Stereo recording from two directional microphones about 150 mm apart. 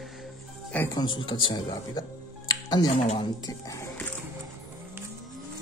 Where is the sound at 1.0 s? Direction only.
30° left (ahead or behind).